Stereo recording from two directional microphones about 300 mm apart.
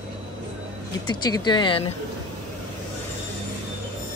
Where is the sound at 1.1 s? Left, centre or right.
Centre.